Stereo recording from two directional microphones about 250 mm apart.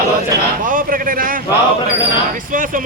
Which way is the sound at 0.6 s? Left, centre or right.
Right.